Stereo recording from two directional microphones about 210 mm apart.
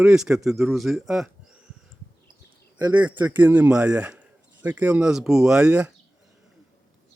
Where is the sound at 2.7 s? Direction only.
20° right (ahead or behind).